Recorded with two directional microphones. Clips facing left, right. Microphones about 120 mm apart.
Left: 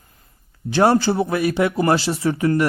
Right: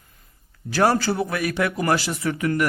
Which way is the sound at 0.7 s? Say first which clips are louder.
Left 4 dB; 25° left (ahead or behind).